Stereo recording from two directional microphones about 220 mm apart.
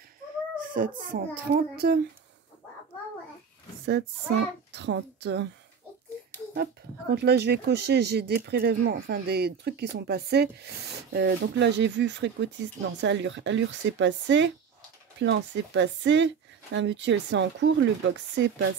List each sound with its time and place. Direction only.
0.7 s a child's voice: 40° right (ahead or behind)
4.7 s speech: 50° right (ahead or behind)
6.2 s a sound: 45° right (ahead or behind)
6.5 s a woman's voice: 45° right (ahead or behind)